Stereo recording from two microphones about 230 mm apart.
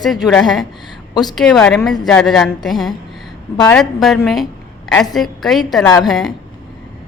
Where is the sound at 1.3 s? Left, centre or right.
Centre.